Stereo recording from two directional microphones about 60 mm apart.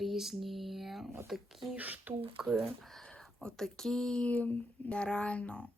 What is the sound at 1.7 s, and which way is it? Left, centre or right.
Speech, right.